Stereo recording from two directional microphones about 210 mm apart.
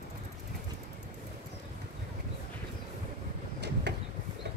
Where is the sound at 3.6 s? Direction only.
55° right (ahead or behind).